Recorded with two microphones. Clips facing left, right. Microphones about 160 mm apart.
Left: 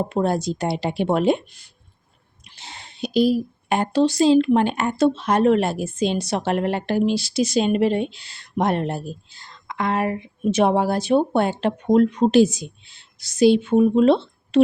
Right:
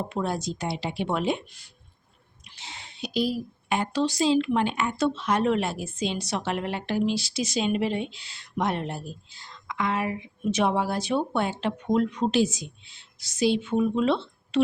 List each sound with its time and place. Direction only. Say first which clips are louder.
0.1 s a woman's voice: left 7 dB; 50° left (ahead or behind)
2.4 s sneeze: left 2 dB; 50° left (ahead or behind)
3.2 s a woman's voice: left 8 dB; 55° left (ahead or behind)
6.2 s a woman's voice: left 7 dB; 45° left (ahead or behind)
7.3 s a woman's voice: left 9 dB; 60° left (ahead or behind)